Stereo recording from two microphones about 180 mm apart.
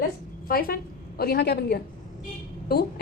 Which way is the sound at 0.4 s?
55° left (ahead or behind).